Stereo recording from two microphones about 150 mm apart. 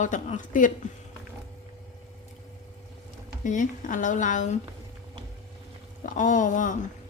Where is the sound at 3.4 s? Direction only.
60° left (ahead or behind).